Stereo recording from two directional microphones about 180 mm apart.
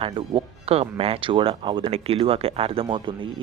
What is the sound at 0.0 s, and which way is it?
Speech, 30° right (ahead or behind).